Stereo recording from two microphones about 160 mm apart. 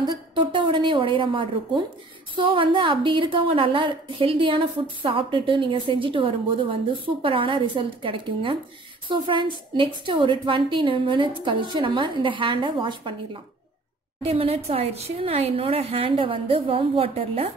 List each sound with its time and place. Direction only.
0.0 s a woman's voice: 25° right (ahead or behind)